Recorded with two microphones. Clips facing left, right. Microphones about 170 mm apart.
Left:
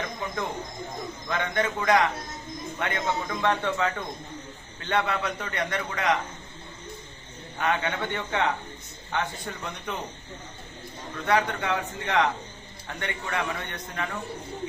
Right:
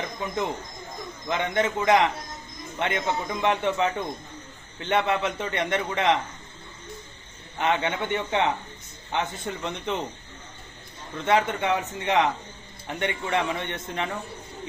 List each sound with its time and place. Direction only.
1.3 s a man's voice: 20° right (ahead or behind)
7.6 s a man's voice: 20° right (ahead or behind)
11.3 s a man's voice: 25° right (ahead or behind)